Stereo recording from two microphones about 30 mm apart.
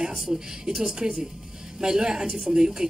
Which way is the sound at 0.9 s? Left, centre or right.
Right.